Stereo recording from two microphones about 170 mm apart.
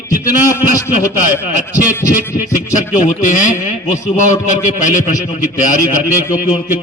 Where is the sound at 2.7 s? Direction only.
50° left (ahead or behind).